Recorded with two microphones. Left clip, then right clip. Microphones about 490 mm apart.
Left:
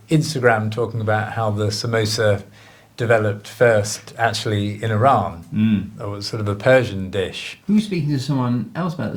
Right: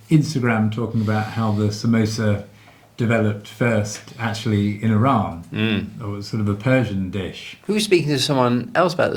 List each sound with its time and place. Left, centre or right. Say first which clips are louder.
0.1 s speech: left 4 dB; left
3.6 s speech: left 7 dB; left
5.5 s speech: even; right
6.1 s speech: left 1 dB; left
7.8 s speech: right 9 dB; right